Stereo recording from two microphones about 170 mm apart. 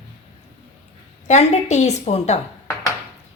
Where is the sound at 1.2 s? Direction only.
40° left (ahead or behind).